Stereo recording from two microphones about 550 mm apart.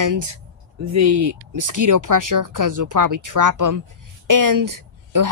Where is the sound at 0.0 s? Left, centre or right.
Right.